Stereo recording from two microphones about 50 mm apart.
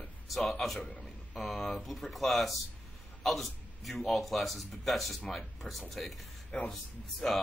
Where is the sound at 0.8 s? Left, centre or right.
Centre.